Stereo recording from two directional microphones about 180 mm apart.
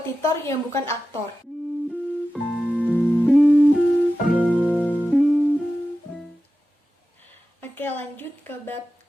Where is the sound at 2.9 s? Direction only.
5° left (ahead or behind).